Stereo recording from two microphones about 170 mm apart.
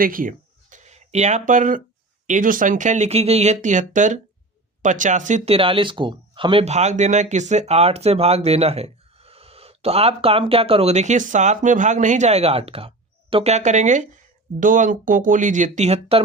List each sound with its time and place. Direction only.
0.0 s a sound: 55° right (ahead or behind)
2.2 s speech: 50° right (ahead or behind)
5.5 s speech: 30° right (ahead or behind)